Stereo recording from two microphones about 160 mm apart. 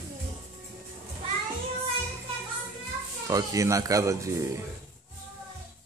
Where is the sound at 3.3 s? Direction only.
20° right (ahead or behind).